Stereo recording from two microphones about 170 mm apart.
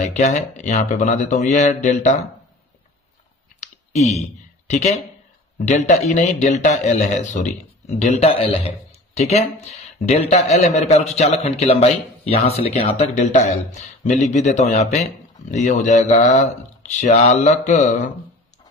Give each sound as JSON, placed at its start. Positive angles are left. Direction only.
{"t": 0.0, "sound": "a man's voice", "side_deg": 45}
{"t": 3.6, "sound": "clicking", "side_deg": 40}
{"t": 4.7, "sound": "a man's voice", "side_deg": 45}